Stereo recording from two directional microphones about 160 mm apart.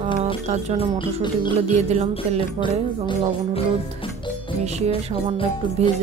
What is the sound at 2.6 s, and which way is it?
Music, 30° left (ahead or behind).